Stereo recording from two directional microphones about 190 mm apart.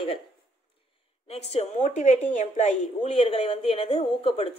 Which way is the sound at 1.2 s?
35° left (ahead or behind).